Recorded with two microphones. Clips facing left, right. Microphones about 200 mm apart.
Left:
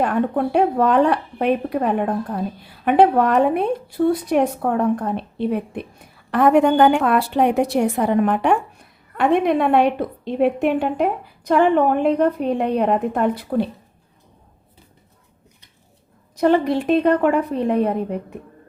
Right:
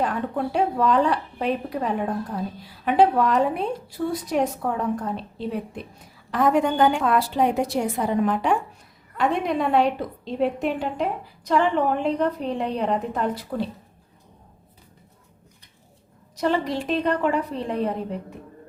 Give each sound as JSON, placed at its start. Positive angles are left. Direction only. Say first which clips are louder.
{"t": 0.0, "sound": "speech", "louder": "left 6 dB", "side_deg": 60}
{"t": 16.4, "sound": "speech", "louder": "left 7 dB", "side_deg": 55}